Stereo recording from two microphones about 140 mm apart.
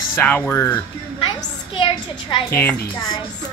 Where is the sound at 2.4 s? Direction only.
15° left (ahead or behind).